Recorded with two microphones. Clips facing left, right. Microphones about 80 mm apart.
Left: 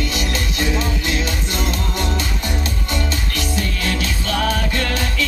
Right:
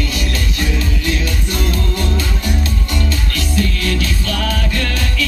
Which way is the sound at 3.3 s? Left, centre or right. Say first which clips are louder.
Right 6 dB; left.